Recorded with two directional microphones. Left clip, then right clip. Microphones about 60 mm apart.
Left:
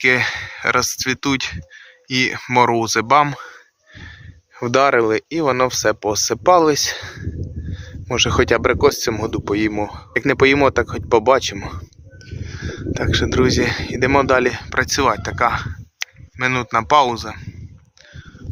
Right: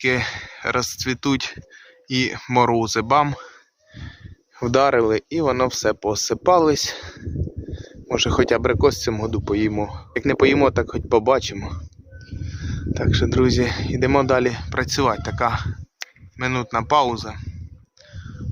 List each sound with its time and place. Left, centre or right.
0.0 s speech: right
0.9 s speech: right
3.9 s wheeze: right
4.6 s speech: right
4.9 s speech: right; by 11.7 s centre
12.7 s speech: centre
13.4 s speech: right